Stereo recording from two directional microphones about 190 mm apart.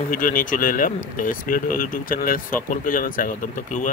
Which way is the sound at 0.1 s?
45° left (ahead or behind).